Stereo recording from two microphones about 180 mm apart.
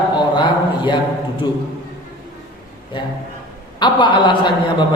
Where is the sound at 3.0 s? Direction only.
25° left (ahead or behind).